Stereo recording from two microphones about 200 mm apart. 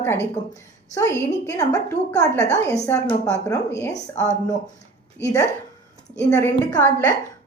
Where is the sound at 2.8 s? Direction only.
10° left (ahead or behind).